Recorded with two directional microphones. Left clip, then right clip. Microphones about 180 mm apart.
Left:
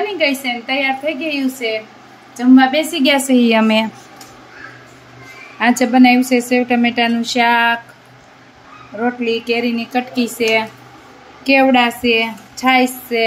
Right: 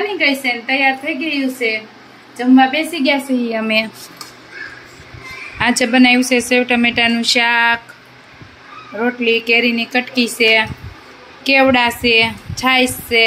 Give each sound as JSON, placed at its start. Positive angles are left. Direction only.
{"t": 0.2, "sound": "a woman's voice", "side_deg": 15}
{"t": 2.9, "sound": "a woman's voice", "side_deg": 40}
{"t": 3.3, "sound": "a woman's voice", "side_deg": 55}
{"t": 3.6, "sound": "a woman's voice", "side_deg": 35}
{"t": 5.6, "sound": "a woman's voice", "side_deg": 0}
{"t": 8.9, "sound": "a woman's voice", "side_deg": -10}